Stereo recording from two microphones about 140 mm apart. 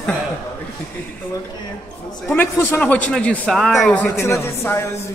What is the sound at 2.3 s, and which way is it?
Speech, 15° left (ahead or behind).